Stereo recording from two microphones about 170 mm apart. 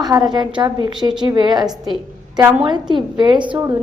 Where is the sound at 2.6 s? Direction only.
25° right (ahead or behind).